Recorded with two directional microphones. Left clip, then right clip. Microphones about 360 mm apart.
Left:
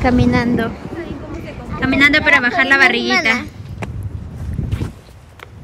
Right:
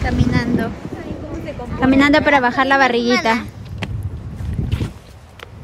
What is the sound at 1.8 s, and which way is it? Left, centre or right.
A woman's voice, centre.